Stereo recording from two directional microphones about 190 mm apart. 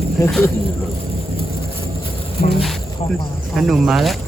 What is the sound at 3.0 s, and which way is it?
Speech, 30° left (ahead or behind).